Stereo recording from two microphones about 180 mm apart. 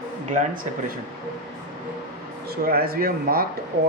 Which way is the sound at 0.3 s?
45° right (ahead or behind).